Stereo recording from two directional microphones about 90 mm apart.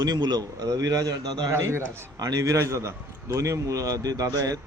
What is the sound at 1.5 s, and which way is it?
A man's voice, 35° right (ahead or behind).